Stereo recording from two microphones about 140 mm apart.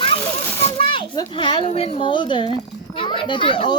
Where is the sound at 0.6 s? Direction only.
40° left (ahead or behind).